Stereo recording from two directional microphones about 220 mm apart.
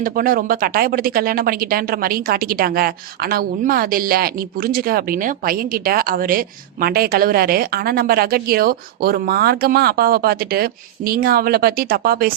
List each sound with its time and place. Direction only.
0.0 s speech: 40° right (ahead or behind)